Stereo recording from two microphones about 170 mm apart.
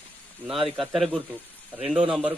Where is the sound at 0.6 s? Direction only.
Centre (ahead or behind).